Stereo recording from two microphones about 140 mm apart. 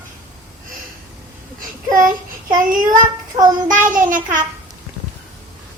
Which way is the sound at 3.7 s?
70° right (ahead or behind).